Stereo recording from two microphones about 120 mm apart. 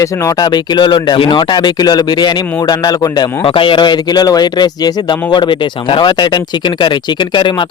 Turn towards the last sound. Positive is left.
turn(degrees=40)  # may be behind; listen again after turning